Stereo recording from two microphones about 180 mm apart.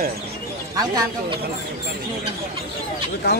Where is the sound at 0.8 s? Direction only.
20° right (ahead or behind).